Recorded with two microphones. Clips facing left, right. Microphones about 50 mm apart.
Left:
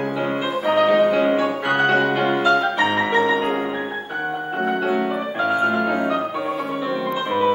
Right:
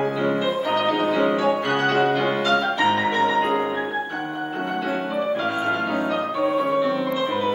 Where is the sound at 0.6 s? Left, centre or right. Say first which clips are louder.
Left 10 dB; centre.